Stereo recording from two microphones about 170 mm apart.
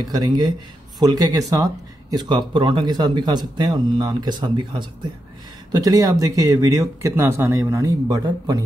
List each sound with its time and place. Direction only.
0.1 s speech: 25° right (ahead or behind)